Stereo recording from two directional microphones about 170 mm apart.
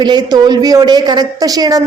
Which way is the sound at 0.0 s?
25° right (ahead or behind).